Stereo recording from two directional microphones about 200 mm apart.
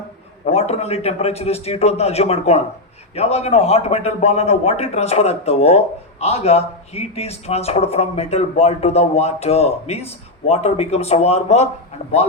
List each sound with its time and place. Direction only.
0.4 s speech: 30° left (ahead or behind)